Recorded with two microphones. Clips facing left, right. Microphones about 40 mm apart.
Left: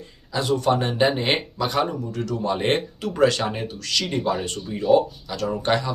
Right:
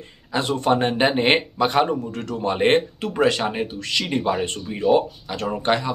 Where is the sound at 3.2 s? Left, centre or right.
Right.